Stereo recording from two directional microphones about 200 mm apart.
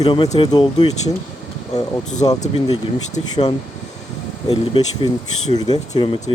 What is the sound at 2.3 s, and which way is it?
Speech, 20° left (ahead or behind).